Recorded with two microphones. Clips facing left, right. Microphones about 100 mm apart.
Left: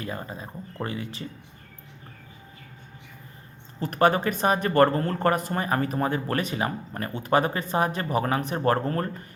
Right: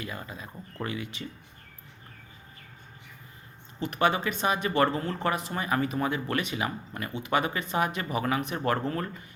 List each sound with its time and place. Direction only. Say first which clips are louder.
0.0 s speech: left 4 dB; 35° left (ahead or behind)
3.8 s speech: left 4 dB; 40° left (ahead or behind)